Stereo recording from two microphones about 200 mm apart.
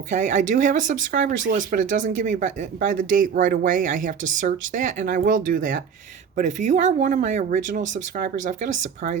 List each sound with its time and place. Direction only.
0.1 s speech: 35° right (ahead or behind)